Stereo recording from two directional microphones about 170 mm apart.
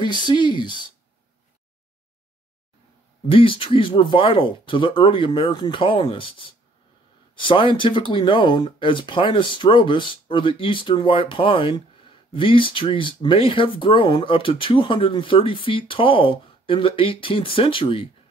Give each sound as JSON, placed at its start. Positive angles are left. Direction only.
{"t": 0.0, "sound": "speech", "side_deg": 25}
{"t": 3.3, "sound": "speech", "side_deg": 30}